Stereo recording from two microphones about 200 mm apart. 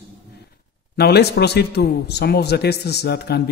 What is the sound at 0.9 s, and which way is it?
A man's voice, 55° left (ahead or behind).